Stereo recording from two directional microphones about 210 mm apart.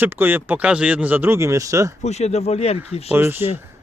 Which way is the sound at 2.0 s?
30° left (ahead or behind).